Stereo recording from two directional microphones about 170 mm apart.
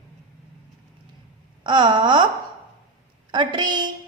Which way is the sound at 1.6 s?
25° right (ahead or behind).